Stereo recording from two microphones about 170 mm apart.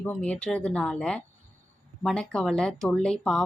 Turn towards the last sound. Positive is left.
turn(degrees=5)  # may be behind; listen again after turning